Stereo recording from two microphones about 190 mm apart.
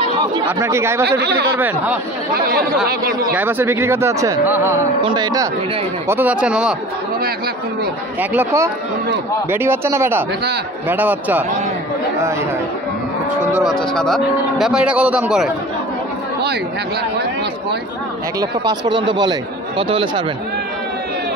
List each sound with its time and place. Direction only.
0.5 s speech: 15° right (ahead or behind)
1.2 s speech: 60° right (ahead or behind)
1.6 s speech: 10° right (ahead or behind)
3.3 s speech: 10° right (ahead or behind)
6.0 s speech: 10° right (ahead or behind)
8.2 s speech: 10° right (ahead or behind)
13.6 s speech: centre (ahead or behind)
18.4 s speech: 20° right (ahead or behind)